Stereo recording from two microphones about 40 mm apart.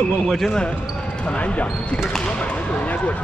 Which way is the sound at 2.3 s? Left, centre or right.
Left.